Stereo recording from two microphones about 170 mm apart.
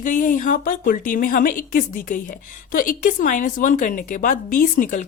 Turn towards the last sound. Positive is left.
turn(degrees=50)  # may be behind; listen again after turning